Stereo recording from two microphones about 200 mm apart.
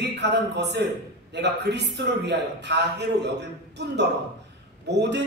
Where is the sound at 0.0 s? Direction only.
60° right (ahead or behind).